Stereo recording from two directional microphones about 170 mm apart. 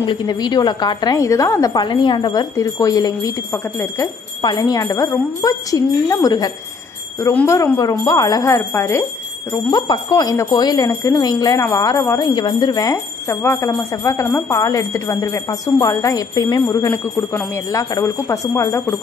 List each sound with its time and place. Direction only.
0.0 s speech: 30° left (ahead or behind)